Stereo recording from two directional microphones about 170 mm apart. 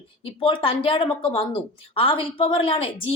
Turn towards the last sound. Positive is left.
turn(degrees=30)  # may be behind; listen again after turning